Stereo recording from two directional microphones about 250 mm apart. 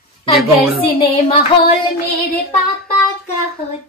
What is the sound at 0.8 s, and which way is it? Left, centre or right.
Speech, left.